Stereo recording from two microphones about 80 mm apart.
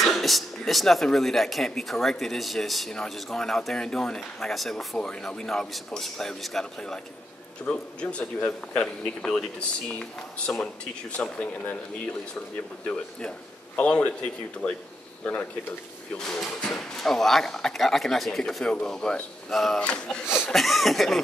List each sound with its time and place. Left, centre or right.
0.0 s speech: centre
13.7 s speech: centre
16.2 s speech: centre
20.4 s speech: centre